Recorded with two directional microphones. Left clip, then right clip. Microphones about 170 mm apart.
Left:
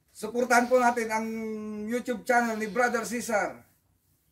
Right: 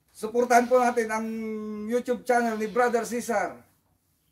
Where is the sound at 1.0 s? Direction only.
10° right (ahead or behind).